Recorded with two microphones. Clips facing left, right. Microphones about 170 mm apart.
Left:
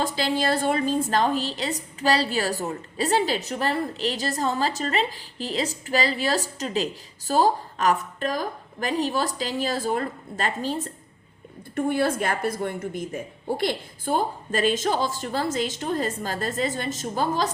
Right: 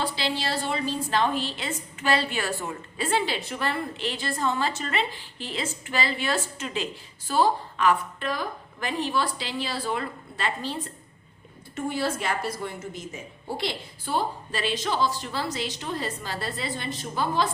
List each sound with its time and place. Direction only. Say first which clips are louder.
0.0 s a woman's voice: left 4 dB; 45° left (ahead or behind)